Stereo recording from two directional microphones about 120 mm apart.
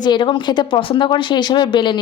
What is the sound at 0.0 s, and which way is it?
A woman's voice, 40° left (ahead or behind).